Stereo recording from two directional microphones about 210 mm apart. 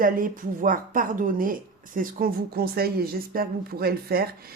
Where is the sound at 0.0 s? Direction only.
40° right (ahead or behind).